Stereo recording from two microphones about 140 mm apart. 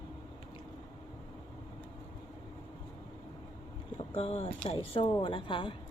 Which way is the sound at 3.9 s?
45° left (ahead or behind).